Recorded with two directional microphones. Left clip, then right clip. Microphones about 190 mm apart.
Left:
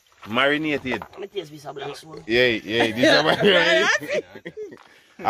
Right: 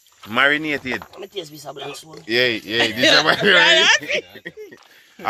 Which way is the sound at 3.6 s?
55° left (ahead or behind).